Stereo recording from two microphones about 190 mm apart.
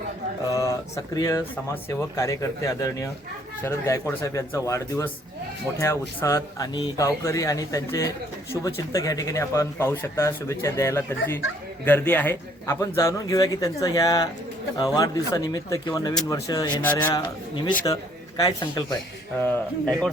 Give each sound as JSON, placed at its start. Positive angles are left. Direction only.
{"t": 0.5, "sound": "speech", "side_deg": 15}
{"t": 17.2, "sound": "speech", "side_deg": 25}
{"t": 19.4, "sound": "a man's voice", "side_deg": 5}